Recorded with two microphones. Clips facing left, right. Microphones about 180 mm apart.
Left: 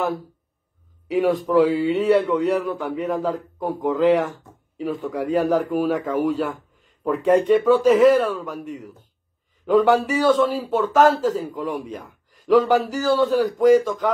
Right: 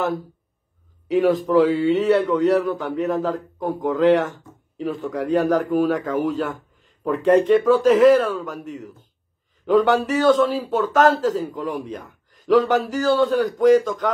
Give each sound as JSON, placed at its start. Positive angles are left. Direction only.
{"t": 1.0, "sound": "speech", "side_deg": 5}